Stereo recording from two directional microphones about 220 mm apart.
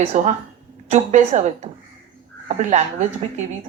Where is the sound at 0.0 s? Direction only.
30° right (ahead or behind).